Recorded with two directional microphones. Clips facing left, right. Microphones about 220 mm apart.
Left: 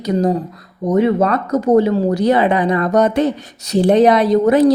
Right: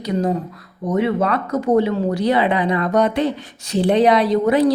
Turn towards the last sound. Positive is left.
turn(degrees=45)  # may be behind; listen again after turning